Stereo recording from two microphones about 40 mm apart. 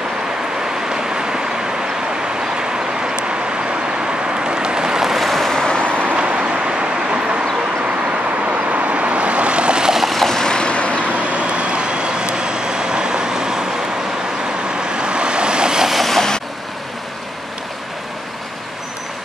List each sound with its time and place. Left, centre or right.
0.9 s vehicle: centre
4.5 s vehicle: right
5.1 s boat: centre
6.1 s vehicle: right
8.5 s vehicle: right
9.9 s vehicle: centre
10.4 s vehicle: left
11.2 s vehicle: right
14.8 s vehicle: right
15.9 s vehicle: centre